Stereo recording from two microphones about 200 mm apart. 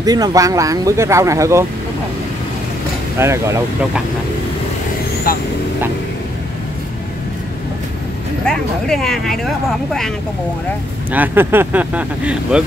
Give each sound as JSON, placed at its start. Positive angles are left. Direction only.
{"t": 0.0, "sound": "speech", "side_deg": -20}
{"t": 3.2, "sound": "speech", "side_deg": -15}
{"t": 8.5, "sound": "speech", "side_deg": 5}
{"t": 11.1, "sound": "speech", "side_deg": -10}